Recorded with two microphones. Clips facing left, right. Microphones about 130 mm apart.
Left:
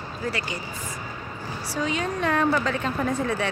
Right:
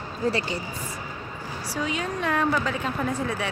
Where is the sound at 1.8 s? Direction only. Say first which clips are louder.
Left 2 dB; 5° right (ahead or behind).